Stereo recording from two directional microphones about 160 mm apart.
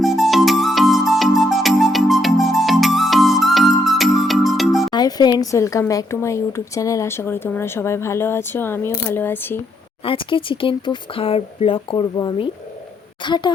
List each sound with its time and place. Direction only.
0.0 s music: centre (ahead or behind)
4.9 s speech: 25° left (ahead or behind)
10.0 s a woman's voice: 35° left (ahead or behind)